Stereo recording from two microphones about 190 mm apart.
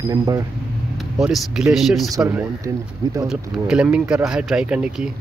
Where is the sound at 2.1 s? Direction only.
10° right (ahead or behind).